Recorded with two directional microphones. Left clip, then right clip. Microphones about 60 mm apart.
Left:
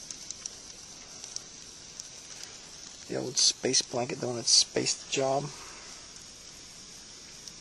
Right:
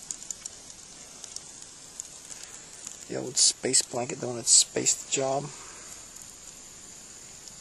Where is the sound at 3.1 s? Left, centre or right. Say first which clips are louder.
Right 1 dB; centre.